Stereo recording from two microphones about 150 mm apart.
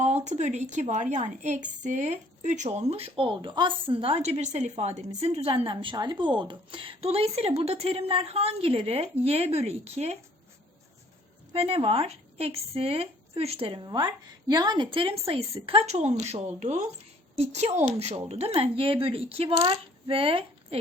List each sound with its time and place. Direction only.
0.0 s a woman's voice: 50° right (ahead or behind)
11.5 s a woman's voice: 40° right (ahead or behind)